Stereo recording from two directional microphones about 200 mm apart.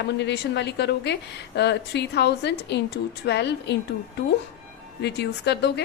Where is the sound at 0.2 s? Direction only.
60° left (ahead or behind).